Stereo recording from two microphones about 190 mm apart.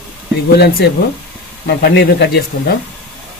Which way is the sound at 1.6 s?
60° left (ahead or behind).